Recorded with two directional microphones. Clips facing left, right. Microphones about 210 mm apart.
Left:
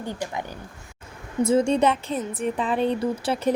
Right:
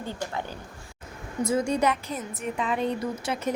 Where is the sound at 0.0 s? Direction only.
15° left (ahead or behind).